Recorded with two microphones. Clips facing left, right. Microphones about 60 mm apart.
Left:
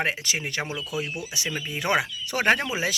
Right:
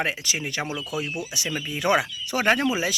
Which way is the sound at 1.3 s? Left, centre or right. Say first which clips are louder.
Right 1 dB; left.